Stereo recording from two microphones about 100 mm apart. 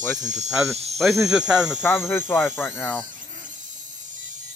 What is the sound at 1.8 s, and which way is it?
Speech, 20° left (ahead or behind).